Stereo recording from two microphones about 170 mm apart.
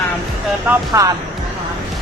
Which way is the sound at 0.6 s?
20° right (ahead or behind).